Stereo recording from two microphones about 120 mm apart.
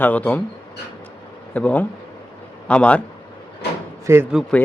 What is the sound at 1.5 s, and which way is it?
A man's voice, 10° left (ahead or behind).